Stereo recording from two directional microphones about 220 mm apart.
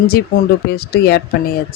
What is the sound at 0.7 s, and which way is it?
Speech, 45° left (ahead or behind).